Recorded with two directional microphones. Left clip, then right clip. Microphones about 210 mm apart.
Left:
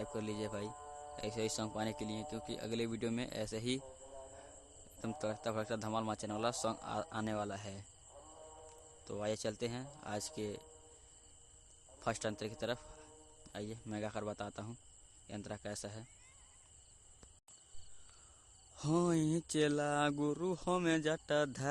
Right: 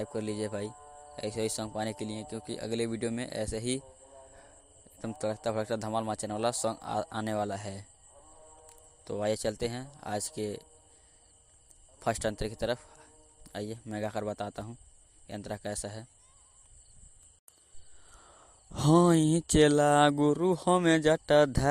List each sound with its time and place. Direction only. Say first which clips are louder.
0.0 s a man's voice: right 7 dB; 20° right (ahead or behind)
0.8 s music: left 1 dB; 30° right (ahead or behind)
1.1 s a man's voice: right 6 dB; 20° right (ahead or behind)
8.3 s music: even; 35° right (ahead or behind)
8.6 s speech: right 7 dB; 20° right (ahead or behind)
11.9 s a man's voice: right 8 dB; 20° right (ahead or behind)
18.7 s speech: right 11 dB; 35° right (ahead or behind)